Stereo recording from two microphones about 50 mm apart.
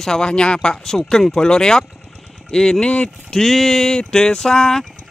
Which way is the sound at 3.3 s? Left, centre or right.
Centre.